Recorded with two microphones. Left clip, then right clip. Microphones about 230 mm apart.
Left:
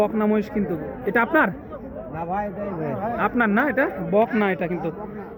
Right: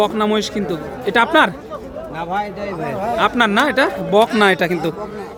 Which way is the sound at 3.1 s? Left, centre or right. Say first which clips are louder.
Right 7 dB; centre.